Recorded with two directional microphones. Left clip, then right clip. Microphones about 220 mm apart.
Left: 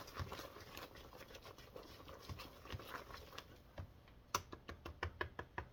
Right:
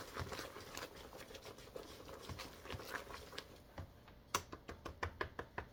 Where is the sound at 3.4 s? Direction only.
15° left (ahead or behind).